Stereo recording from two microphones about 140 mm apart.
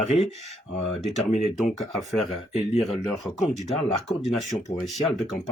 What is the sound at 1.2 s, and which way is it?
Speech, 50° left (ahead or behind).